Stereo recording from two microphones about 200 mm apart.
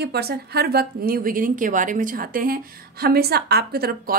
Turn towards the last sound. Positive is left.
turn(degrees=-50)  # may be behind; listen again after turning